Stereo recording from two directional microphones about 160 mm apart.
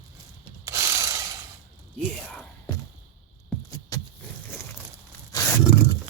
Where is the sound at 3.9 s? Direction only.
20° left (ahead or behind).